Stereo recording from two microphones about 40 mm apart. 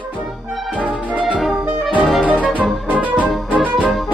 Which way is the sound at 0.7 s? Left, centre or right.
Right.